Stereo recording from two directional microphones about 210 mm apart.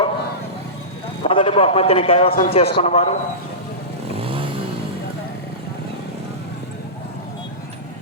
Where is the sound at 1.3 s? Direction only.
25° left (ahead or behind).